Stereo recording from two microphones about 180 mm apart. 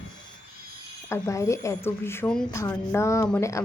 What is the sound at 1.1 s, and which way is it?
Speech, 15° left (ahead or behind).